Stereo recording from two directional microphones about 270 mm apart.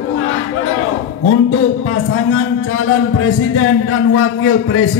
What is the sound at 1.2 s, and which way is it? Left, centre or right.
A man's voice, left.